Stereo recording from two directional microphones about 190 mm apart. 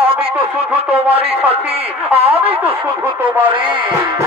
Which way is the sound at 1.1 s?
30° right (ahead or behind).